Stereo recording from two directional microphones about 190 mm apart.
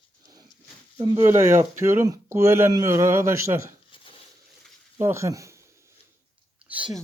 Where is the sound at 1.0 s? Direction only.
15° right (ahead or behind).